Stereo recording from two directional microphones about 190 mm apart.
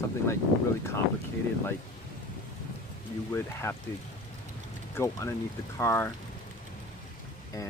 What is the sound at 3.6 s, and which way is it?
Speech, 15° left (ahead or behind).